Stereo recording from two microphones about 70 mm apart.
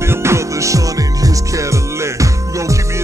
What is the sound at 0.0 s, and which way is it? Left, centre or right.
Music, right.